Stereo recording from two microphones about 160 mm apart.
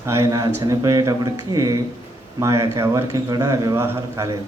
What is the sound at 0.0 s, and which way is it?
Speech, 15° right (ahead or behind).